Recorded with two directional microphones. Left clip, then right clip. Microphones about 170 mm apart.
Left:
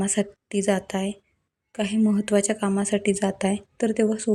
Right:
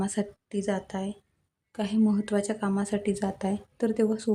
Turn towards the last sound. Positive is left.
turn(degrees=15)  # may be behind; listen again after turning